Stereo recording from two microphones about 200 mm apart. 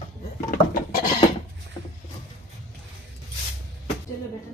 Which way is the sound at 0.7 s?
45° left (ahead or behind).